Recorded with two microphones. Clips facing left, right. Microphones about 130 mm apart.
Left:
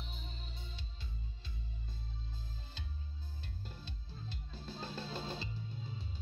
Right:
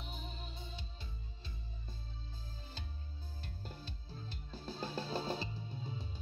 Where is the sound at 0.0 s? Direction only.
45° right (ahead or behind).